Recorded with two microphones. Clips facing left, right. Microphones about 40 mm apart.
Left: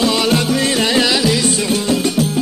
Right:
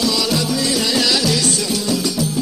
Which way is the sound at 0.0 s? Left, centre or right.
Left.